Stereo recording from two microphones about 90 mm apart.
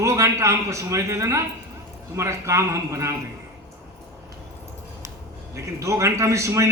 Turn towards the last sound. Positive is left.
turn(degrees=-35)  # may be behind; listen again after turning